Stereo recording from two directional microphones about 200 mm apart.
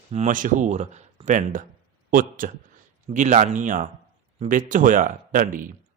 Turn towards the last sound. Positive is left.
turn(degrees=-40)  # may be behind; listen again after turning